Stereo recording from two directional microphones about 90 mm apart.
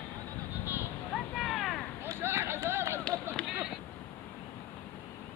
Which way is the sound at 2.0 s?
30° right (ahead or behind).